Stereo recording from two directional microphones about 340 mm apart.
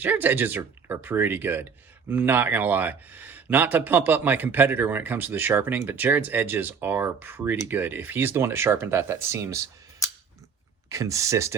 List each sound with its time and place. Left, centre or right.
0.0 s speech: centre
10.8 s speech: centre